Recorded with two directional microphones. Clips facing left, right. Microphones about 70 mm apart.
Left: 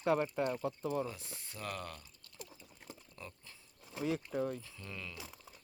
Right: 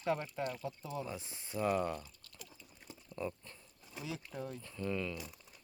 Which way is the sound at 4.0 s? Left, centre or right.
Left.